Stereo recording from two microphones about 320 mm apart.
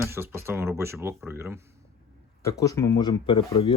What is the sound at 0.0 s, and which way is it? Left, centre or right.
Speech, centre.